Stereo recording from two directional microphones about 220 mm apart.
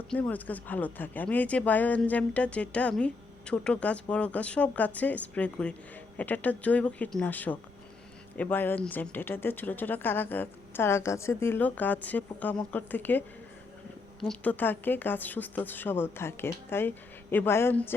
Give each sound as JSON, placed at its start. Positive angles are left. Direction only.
{"t": 0.1, "sound": "speech", "side_deg": 5}